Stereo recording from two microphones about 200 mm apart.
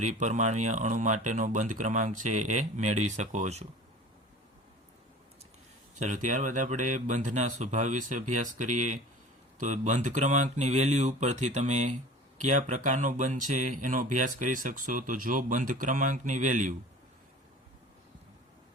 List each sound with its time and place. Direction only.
0.0 s speech: 35° right (ahead or behind)
6.0 s speech: 40° right (ahead or behind)